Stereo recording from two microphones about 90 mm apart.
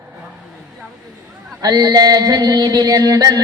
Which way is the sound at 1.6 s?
45° right (ahead or behind).